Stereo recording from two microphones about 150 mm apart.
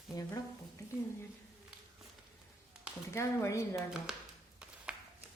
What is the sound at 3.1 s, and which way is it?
Speech, 20° left (ahead or behind).